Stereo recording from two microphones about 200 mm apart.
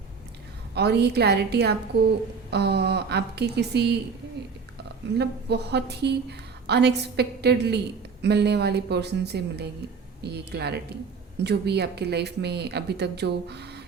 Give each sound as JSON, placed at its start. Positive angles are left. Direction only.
{"t": 0.7, "sound": "a woman's voice", "side_deg": -55}
{"t": 5.1, "sound": "a woman's voice", "side_deg": -55}